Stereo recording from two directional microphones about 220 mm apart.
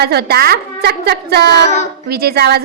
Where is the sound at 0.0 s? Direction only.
45° right (ahead or behind).